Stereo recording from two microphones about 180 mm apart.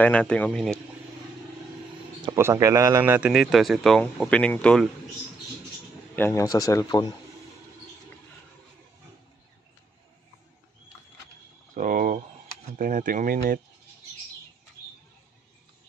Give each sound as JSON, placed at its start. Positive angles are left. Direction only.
{"t": 0.0, "sound": "a man's voice", "side_deg": 5}
{"t": 2.3, "sound": "a man's voice", "side_deg": -15}
{"t": 6.1, "sound": "a man's voice", "side_deg": 15}
{"t": 11.7, "sound": "a sound", "side_deg": -45}
{"t": 12.7, "sound": "speech", "side_deg": -50}